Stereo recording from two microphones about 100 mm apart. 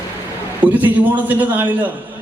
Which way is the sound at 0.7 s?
15° right (ahead or behind).